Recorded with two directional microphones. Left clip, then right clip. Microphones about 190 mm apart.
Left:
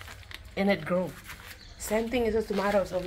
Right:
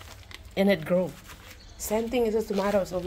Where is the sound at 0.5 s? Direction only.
30° right (ahead or behind).